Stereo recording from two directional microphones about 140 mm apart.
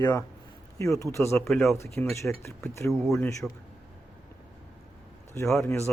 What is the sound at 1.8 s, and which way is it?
Speech, 20° left (ahead or behind).